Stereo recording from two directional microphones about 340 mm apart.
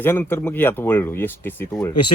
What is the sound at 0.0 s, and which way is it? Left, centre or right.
Speech, centre.